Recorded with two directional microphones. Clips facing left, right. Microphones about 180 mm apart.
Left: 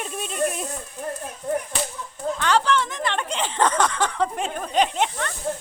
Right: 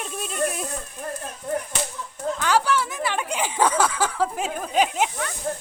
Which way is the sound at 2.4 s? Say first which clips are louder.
Left 1 dB; 10° right (ahead or behind).